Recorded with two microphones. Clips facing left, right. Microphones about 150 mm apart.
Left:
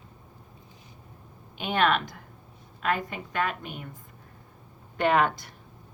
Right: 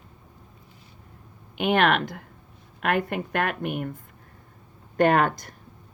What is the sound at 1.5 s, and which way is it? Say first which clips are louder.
A woman's voice: right 4 dB; 60° right (ahead or behind).